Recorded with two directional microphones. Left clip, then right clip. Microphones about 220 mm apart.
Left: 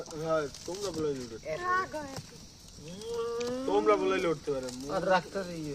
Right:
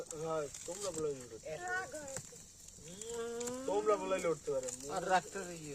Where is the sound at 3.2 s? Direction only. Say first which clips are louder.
Left 8 dB; 15° right (ahead or behind).